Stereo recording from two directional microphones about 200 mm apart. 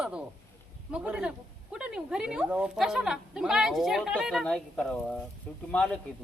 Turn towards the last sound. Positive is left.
turn(degrees=5)  # may be behind; listen again after turning